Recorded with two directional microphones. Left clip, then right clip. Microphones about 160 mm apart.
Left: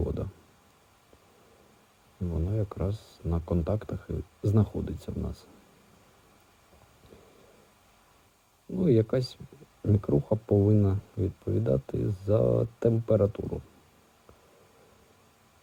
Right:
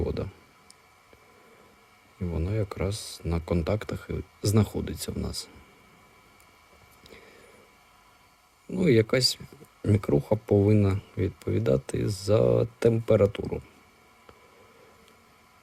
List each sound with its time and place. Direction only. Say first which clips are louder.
0.0 s clicking: right 3 dB; 15° right (ahead or behind)
2.3 s speech: right 3 dB; 20° right (ahead or behind)
8.7 s speech: right 3 dB; 15° right (ahead or behind)